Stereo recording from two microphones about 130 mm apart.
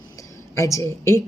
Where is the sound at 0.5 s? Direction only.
25° left (ahead or behind).